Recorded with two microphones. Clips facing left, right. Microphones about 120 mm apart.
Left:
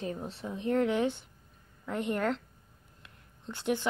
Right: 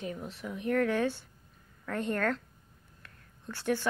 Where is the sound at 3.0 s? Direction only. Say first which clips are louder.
Left 1 dB; 20° left (ahead or behind).